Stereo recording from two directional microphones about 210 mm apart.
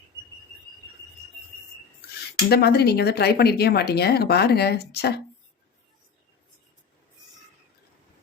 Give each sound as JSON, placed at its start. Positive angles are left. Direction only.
{"t": 2.5, "sound": "speech", "side_deg": 50}